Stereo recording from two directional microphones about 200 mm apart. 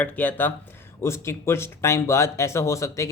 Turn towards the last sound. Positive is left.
turn(degrees=15)  # may be behind; listen again after turning